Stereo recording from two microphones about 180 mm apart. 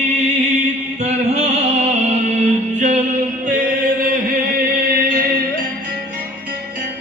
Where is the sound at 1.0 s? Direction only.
40° right (ahead or behind).